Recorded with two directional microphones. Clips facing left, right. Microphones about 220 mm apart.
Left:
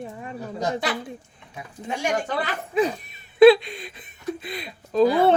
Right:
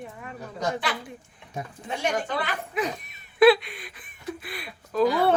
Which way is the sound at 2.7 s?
30° left (ahead or behind).